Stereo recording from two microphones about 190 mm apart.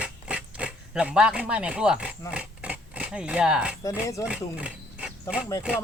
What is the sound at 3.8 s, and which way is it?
Speech, 15° left (ahead or behind).